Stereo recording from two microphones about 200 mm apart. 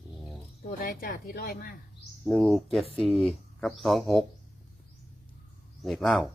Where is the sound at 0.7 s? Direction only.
45° left (ahead or behind).